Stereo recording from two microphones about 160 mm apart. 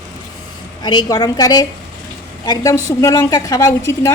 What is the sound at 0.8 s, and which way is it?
A woman's voice, 25° left (ahead or behind).